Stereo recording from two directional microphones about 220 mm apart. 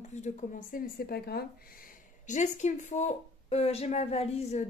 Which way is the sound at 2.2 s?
35° left (ahead or behind).